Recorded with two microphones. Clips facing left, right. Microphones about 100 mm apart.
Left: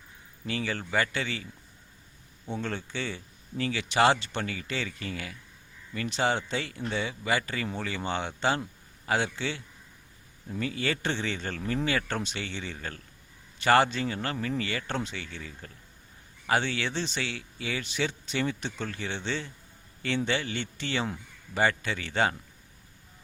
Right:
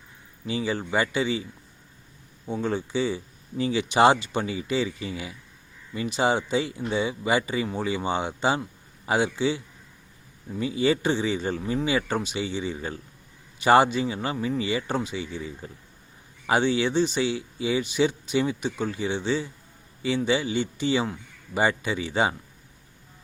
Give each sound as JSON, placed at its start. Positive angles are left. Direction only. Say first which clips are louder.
{"t": 0.4, "sound": "speech", "louder": "right 5 dB", "side_deg": -15}
{"t": 2.5, "sound": "speech", "louder": "right 7 dB", "side_deg": -10}